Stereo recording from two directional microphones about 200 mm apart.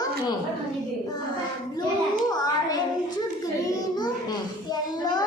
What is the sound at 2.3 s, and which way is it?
Speech, 20° left (ahead or behind).